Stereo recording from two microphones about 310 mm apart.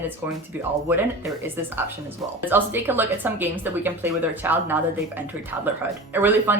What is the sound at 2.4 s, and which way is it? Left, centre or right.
Speech, centre.